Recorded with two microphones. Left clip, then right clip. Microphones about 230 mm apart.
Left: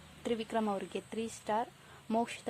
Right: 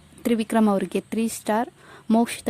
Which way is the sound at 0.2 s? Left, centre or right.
Right.